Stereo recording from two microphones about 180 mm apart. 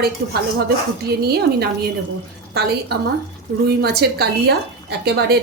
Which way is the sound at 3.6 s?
65° right (ahead or behind).